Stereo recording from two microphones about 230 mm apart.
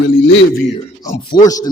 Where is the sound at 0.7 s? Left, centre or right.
Centre.